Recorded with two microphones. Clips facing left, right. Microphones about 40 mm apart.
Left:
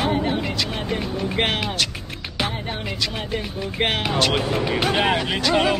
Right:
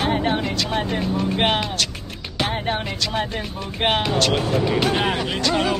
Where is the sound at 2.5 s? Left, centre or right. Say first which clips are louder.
Right 6 dB; right.